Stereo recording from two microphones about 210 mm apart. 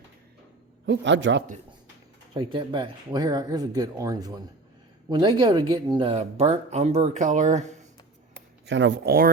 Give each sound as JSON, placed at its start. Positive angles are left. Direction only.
{"t": 0.9, "sound": "speech", "side_deg": -60}
{"t": 2.3, "sound": "speech", "side_deg": -20}
{"t": 8.6, "sound": "speech", "side_deg": -60}